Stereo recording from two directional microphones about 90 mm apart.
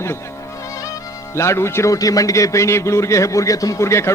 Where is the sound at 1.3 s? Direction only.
30° left (ahead or behind).